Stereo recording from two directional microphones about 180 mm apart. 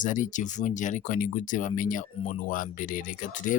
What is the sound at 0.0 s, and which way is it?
Speech, 45° left (ahead or behind).